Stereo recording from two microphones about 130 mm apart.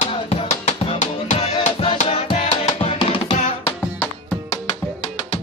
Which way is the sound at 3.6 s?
10° left (ahead or behind).